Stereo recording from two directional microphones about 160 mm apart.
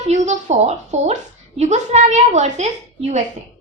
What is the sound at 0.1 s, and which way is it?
A woman's voice, 45° right (ahead or behind).